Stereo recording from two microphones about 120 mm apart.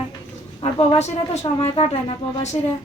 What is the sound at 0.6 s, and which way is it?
Speech, 60° left (ahead or behind).